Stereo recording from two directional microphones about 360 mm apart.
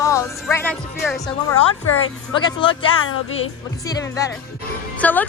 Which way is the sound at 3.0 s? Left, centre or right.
Left.